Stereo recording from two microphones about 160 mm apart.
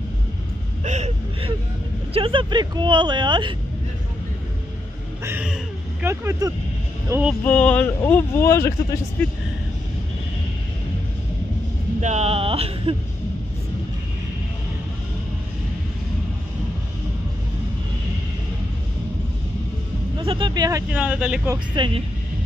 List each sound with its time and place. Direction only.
0.8 s a sound: 45° right (ahead or behind)
2.1 s speech: 35° right (ahead or behind)
5.2 s speech: 10° right (ahead or behind)
7.4 s speech: 10° left (ahead or behind)
12.0 s speech: 45° right (ahead or behind)
20.2 s speech: 30° right (ahead or behind)
20.9 s speech: 5° right (ahead or behind)
21.7 s speech: 30° right (ahead or behind)